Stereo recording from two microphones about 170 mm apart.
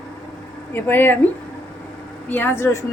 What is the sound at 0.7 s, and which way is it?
A woman's voice, 10° left (ahead or behind).